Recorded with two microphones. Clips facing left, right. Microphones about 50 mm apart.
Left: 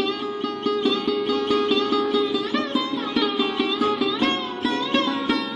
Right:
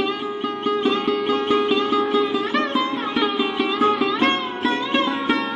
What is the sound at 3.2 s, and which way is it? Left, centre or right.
Music, centre.